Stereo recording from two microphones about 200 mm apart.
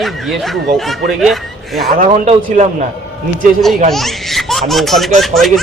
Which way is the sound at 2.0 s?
35° right (ahead or behind).